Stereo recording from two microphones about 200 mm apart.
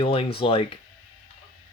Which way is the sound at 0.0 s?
30° left (ahead or behind).